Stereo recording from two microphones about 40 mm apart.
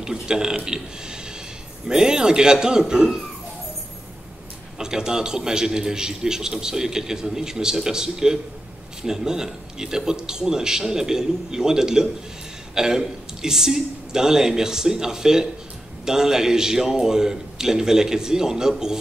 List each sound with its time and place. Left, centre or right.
0.0 s a man's voice: centre
4.7 s a man's voice: centre